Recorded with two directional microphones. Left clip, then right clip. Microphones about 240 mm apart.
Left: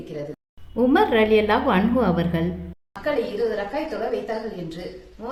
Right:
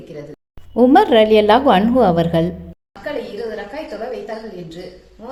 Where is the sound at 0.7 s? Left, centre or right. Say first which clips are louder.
Right 7 dB; right.